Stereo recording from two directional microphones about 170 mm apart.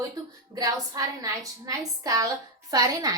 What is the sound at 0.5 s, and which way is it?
A woman's voice, 20° right (ahead or behind).